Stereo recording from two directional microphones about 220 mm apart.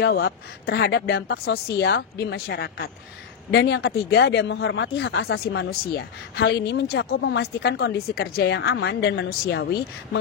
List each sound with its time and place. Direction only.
0.0 s speech: 45° left (ahead or behind)